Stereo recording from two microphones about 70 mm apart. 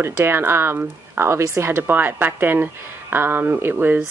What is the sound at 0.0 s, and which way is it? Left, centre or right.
Speech, right.